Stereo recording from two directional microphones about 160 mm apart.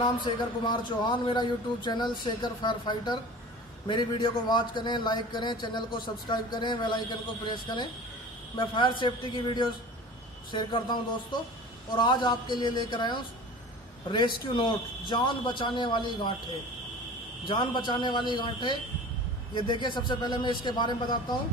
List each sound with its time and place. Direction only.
0.0 s a man's voice: 30° left (ahead or behind)
12.0 s a man's voice: 30° left (ahead or behind)
14.5 s a man's voice: 30° left (ahead or behind)
17.5 s a man's voice: 30° left (ahead or behind)